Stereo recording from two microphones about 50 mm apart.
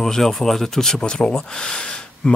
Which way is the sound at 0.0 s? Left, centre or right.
Centre.